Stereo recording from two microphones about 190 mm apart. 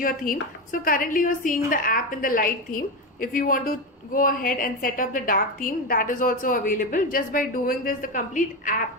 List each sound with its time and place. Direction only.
0.0 s a woman's voice: 45° left (ahead or behind)